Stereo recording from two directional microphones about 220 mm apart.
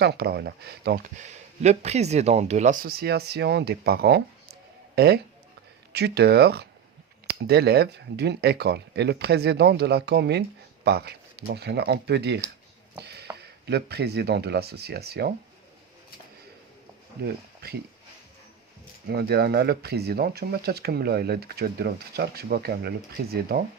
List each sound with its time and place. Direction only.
0.0 s speech: 45° right (ahead or behind)
1.2 s speech: 30° right (ahead or behind); by 12.4 s 50° right (ahead or behind)
13.0 s a sound: 50° right (ahead or behind)
13.3 s speech: 50° right (ahead or behind)
17.2 s speech: 45° right (ahead or behind)
19.0 s speech: 45° right (ahead or behind)